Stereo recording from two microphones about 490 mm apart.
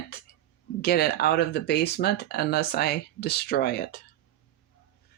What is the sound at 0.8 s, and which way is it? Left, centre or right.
Speech, centre.